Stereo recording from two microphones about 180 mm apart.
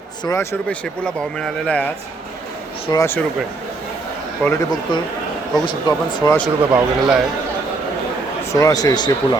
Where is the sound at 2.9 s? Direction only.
15° left (ahead or behind).